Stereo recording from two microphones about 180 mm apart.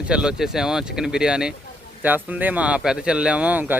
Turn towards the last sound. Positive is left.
turn(degrees=-10)  # may be behind; listen again after turning